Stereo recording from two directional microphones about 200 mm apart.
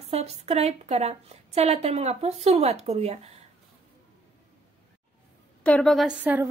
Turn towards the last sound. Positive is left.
turn(degrees=-10)  # may be behind; listen again after turning